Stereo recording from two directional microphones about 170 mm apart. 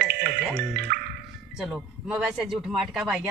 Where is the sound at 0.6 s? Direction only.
75° right (ahead or behind).